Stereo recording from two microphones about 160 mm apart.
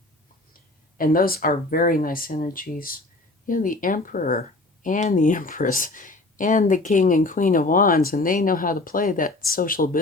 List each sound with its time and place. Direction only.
0.9 s speech: 65° left (ahead or behind)